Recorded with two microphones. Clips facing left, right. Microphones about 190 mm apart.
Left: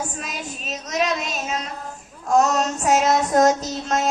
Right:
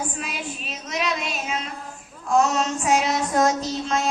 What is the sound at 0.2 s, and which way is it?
Child singing, 40° left (ahead or behind).